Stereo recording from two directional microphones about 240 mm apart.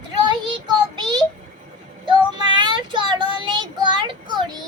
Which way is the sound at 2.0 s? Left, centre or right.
Centre.